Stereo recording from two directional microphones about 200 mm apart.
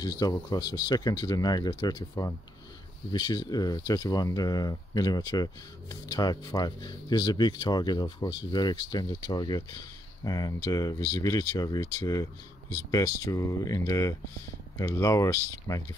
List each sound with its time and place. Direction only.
0.0 s speech: 20° left (ahead or behind)